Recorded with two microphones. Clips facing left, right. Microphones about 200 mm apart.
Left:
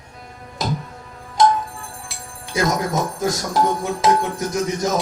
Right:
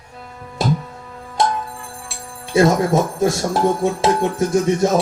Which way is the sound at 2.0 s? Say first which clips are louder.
Right 3 dB; 30° right (ahead or behind).